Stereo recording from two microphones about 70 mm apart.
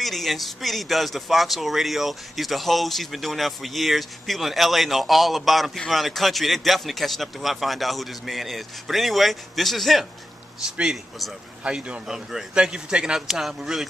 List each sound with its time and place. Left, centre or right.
0.0 s speech: centre
11.6 s a man's voice: centre